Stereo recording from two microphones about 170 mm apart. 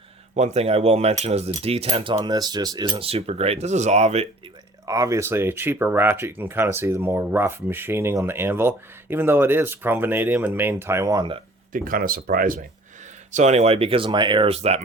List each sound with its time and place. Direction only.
0.3 s speech: 40° right (ahead or behind)
2.1 s speech: 20° right (ahead or behind); by 4.3 s 40° right (ahead or behind)
4.9 s speech: 20° right (ahead or behind)
11.7 s speech: 55° right (ahead or behind)
13.3 s speech: 40° right (ahead or behind)